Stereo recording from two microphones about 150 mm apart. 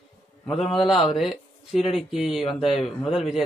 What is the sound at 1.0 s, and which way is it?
Speech, centre (ahead or behind).